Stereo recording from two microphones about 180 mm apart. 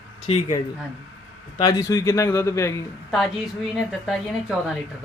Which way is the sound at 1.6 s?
20° left (ahead or behind).